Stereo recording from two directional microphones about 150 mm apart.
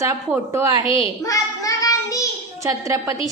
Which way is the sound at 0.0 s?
20° right (ahead or behind).